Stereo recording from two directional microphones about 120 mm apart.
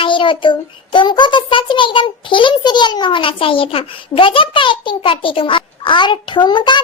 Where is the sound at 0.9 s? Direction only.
40° left (ahead or behind).